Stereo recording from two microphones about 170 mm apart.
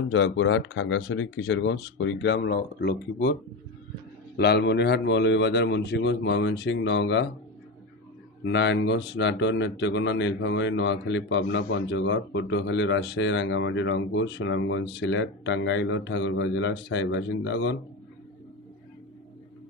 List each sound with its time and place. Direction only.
0.1 s a man's voice: 90° left; by 3.3 s 70° left (ahead or behind)
4.4 s a man's voice: 75° left (ahead or behind)
8.5 s a man's voice: 90° left